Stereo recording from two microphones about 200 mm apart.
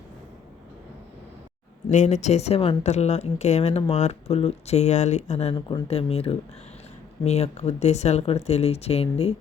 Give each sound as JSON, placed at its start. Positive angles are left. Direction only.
{"t": 1.9, "sound": "speech", "side_deg": 35}
{"t": 5.5, "sound": "speech", "side_deg": 20}